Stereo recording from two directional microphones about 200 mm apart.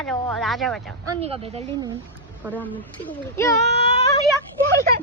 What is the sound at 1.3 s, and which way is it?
Speech, 30° right (ahead or behind).